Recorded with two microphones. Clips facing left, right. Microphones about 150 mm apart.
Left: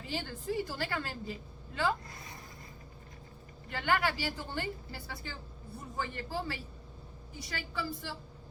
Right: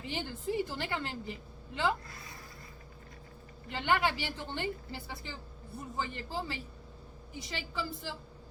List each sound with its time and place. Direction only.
0.0 s a woman's voice: 20° right (ahead or behind)
3.7 s a woman's voice: 20° right (ahead or behind)